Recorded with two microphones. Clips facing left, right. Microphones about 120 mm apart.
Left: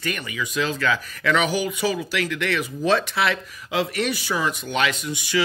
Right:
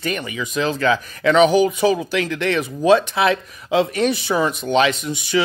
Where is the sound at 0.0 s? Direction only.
25° right (ahead or behind).